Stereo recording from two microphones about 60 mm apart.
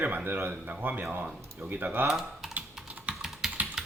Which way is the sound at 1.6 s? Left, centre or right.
Right.